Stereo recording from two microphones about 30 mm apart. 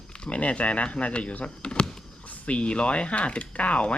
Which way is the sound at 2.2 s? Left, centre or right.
Left.